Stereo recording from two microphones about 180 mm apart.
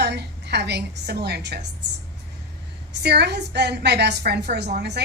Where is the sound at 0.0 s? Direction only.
65° right (ahead or behind).